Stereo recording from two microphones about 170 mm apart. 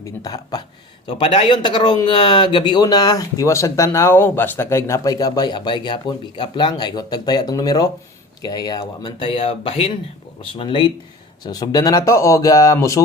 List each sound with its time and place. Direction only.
0.0 s speech: 20° left (ahead or behind)